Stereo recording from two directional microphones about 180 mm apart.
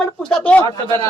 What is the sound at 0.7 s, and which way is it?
Speech, 20° left (ahead or behind).